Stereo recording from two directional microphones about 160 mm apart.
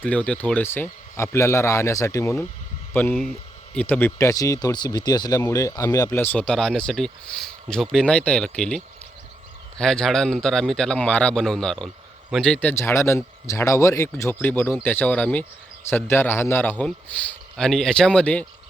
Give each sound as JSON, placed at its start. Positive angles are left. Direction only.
{"t": 0.0, "sound": "speech", "side_deg": 10}